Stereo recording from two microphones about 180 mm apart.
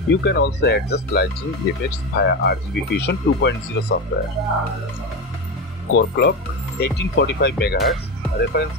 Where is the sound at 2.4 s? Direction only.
70° left (ahead or behind).